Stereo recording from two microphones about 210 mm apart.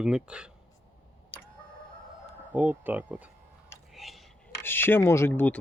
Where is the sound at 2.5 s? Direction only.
10° right (ahead or behind).